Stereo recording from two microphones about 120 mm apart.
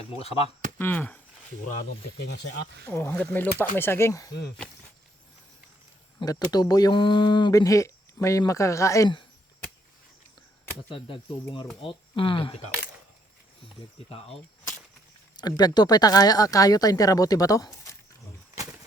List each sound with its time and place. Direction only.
0.8 s speech: 15° left (ahead or behind)
2.8 s speech: 20° left (ahead or behind)
6.5 s speech: 35° left (ahead or behind)
10.8 s speech: 45° left (ahead or behind)
15.4 s speech: 35° left (ahead or behind)